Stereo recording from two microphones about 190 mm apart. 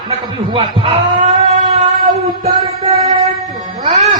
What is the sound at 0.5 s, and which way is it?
Speech, 25° right (ahead or behind).